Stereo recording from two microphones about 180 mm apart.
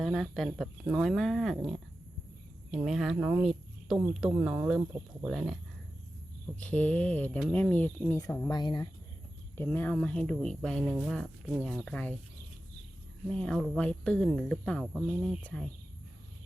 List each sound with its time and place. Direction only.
0.0 s speech: centre (ahead or behind)
2.7 s speech: centre (ahead or behind)
6.6 s speech: 5° left (ahead or behind)
8.4 s speech: 25° left (ahead or behind)
9.6 s speech: 10° left (ahead or behind)
13.3 s speech: 5° left (ahead or behind)